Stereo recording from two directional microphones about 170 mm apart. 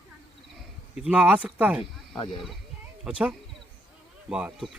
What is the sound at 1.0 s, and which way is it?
Speech, 10° right (ahead or behind).